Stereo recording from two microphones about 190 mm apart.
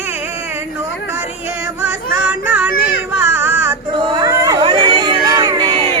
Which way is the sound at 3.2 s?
10° right (ahead or behind).